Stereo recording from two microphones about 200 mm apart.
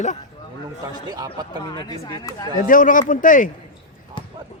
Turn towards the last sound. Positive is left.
turn(degrees=40)  # may be behind; listen again after turning